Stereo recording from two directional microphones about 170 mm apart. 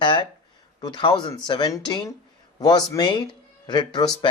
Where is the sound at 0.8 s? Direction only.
25° left (ahead or behind).